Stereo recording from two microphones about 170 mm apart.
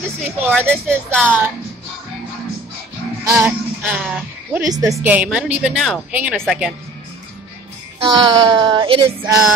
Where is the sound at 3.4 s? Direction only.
5° right (ahead or behind).